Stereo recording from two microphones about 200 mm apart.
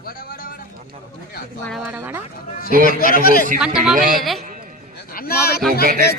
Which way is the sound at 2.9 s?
45° left (ahead or behind).